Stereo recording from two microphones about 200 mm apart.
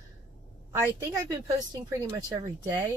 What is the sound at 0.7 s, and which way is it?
Speech, 15° right (ahead or behind).